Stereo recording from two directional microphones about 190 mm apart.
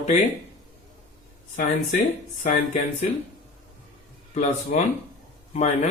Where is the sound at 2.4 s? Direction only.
35° left (ahead or behind).